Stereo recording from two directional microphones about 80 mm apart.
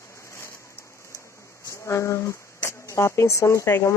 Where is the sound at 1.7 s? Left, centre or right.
Left.